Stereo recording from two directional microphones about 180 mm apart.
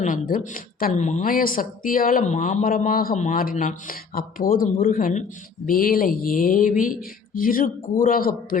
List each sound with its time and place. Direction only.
0.0 s a woman's voice: 50° left (ahead or behind)